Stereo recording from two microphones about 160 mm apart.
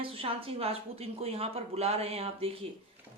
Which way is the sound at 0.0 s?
35° right (ahead or behind).